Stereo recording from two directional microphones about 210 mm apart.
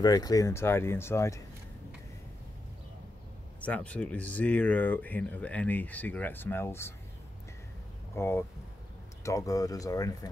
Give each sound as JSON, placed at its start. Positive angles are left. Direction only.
{"t": 0.0, "sound": "speech", "side_deg": 20}
{"t": 3.6, "sound": "speech", "side_deg": 5}
{"t": 8.2, "sound": "speech", "side_deg": 10}